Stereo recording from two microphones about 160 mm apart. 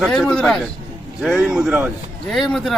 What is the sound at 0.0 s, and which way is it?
Speech, centre (ahead or behind).